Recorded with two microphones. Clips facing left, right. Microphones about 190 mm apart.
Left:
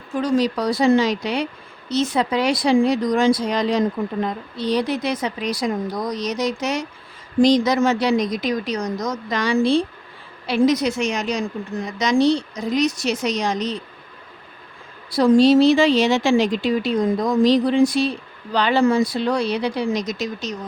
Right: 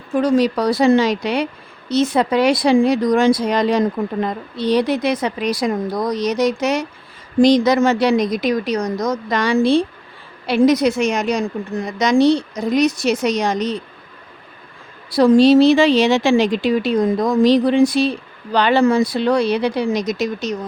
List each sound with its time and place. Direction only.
0.2 s speech: 65° right (ahead or behind)
15.1 s a woman's voice: 75° right (ahead or behind)